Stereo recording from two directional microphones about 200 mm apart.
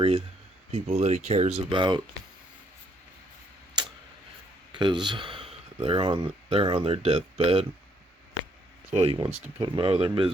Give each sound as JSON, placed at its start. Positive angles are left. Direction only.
{"t": 0.7, "sound": "speech", "side_deg": -35}
{"t": 3.8, "sound": "tick-tock", "side_deg": -20}
{"t": 4.7, "sound": "speech", "side_deg": -25}
{"t": 8.9, "sound": "speech", "side_deg": -30}